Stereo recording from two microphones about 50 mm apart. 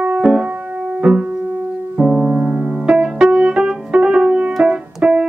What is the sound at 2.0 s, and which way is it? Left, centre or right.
Piano, right.